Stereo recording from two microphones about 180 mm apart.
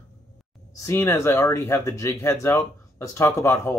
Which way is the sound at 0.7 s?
15° left (ahead or behind).